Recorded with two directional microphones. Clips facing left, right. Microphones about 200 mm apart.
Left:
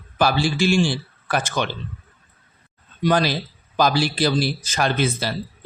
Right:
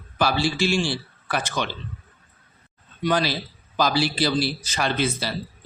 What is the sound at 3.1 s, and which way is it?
A man's voice, 45° left (ahead or behind).